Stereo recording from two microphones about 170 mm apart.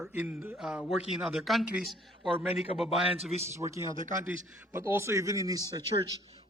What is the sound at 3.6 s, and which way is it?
A man's voice, 15° right (ahead or behind).